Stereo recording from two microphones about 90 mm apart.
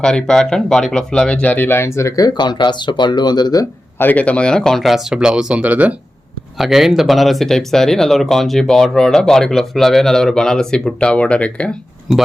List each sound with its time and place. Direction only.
0.0 s speech: 10° left (ahead or behind); by 2.2 s 35° left (ahead or behind)
2.2 s speech: 55° left (ahead or behind)
3.9 s speech: 20° left (ahead or behind); by 6.0 s 15° right (ahead or behind)
6.6 s speech: 5° right (ahead or behind); by 11.7 s 15° left (ahead or behind)